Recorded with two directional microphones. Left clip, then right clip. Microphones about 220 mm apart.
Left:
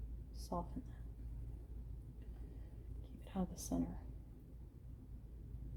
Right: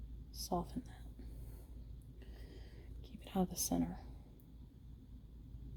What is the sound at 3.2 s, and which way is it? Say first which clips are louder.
Speech: right 7 dB; 50° right (ahead or behind).